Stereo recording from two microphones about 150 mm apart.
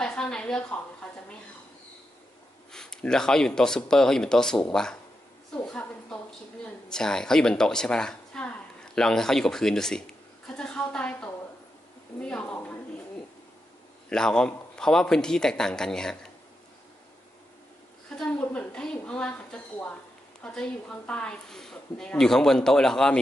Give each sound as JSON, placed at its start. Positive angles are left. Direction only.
{"t": 0.0, "sound": "a woman's voice", "side_deg": 5}
{"t": 2.7, "sound": "a woman's voice", "side_deg": 5}
{"t": 6.6, "sound": "a sound", "side_deg": 5}
{"t": 14.0, "sound": "speech", "side_deg": 5}
{"t": 18.1, "sound": "a sound", "side_deg": 5}
{"t": 20.4, "sound": "speech", "side_deg": 5}